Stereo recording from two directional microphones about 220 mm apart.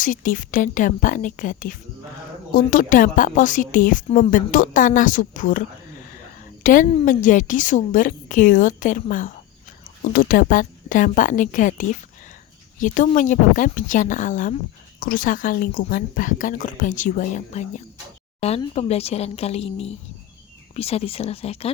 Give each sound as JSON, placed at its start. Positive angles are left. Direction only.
{"t": 0.0, "sound": "a woman's voice", "side_deg": 35}